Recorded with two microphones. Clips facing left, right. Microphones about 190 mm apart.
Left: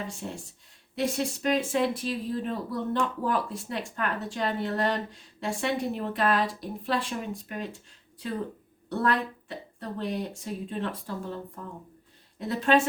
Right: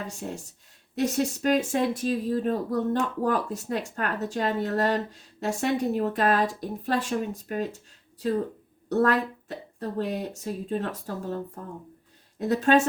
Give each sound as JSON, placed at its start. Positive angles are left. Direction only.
{"t": 0.9, "sound": "speech", "side_deg": -45}
{"t": 8.9, "sound": "speech", "side_deg": -45}
{"t": 12.4, "sound": "speech", "side_deg": -45}